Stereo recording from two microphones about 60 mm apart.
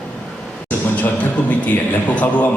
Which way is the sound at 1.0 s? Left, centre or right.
Left.